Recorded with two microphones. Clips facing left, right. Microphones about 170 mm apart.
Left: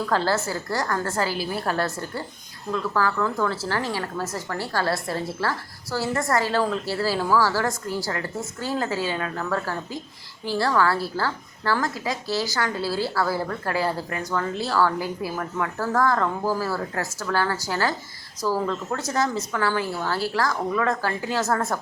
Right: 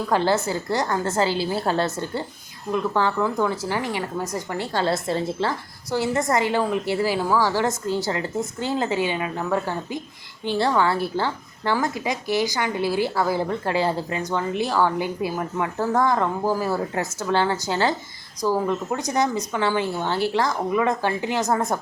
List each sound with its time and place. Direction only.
0.0 s a woman's voice: 20° right (ahead or behind)